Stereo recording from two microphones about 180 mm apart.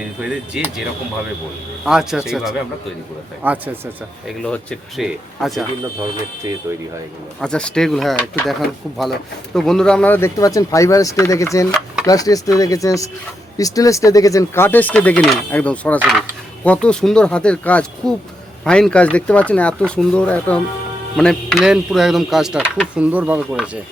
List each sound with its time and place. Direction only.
0.2 s speech: 5° right (ahead or behind)
1.8 s speech: 5° right (ahead or behind)
4.4 s speech: 5° left (ahead or behind)
6.7 s speech: 15° right (ahead or behind)
7.4 s speech: 5° left (ahead or behind)